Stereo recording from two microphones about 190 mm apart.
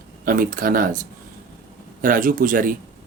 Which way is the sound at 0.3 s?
45° right (ahead or behind).